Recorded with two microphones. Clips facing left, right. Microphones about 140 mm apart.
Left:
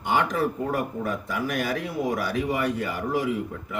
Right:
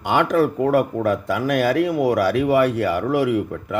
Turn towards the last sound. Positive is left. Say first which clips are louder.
# right 7 dB
turn(degrees=-80)